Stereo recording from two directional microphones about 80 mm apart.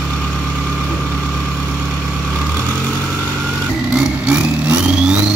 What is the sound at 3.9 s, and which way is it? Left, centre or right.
Vehicle, centre.